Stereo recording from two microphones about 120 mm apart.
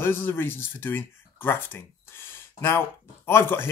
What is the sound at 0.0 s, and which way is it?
Speech, 20° left (ahead or behind).